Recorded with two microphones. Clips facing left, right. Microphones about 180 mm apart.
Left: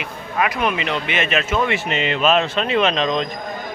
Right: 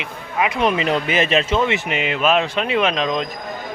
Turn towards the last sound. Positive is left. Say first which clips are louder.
# left 1 dB
turn(degrees=-10)  # may be behind; listen again after turning